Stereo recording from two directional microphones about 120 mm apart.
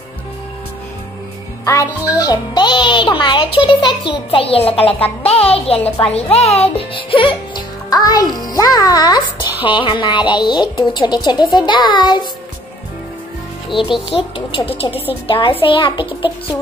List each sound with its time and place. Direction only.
1.6 s a child's voice: 25° left (ahead or behind)
8.5 s music: 30° left (ahead or behind)
14.0 s a child's voice: 50° left (ahead or behind)